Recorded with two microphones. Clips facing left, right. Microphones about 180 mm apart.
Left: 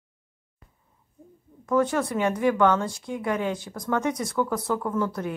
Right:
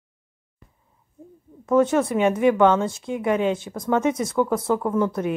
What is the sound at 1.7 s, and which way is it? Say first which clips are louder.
Speech: right 5 dB; 25° right (ahead or behind).